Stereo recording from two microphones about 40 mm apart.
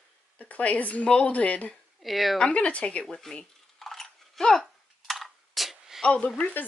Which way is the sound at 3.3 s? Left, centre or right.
Centre.